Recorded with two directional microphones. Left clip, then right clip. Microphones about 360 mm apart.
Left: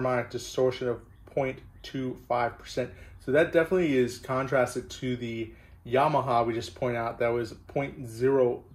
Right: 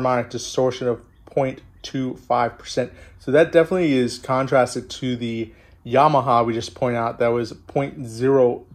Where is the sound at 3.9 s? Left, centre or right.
Centre.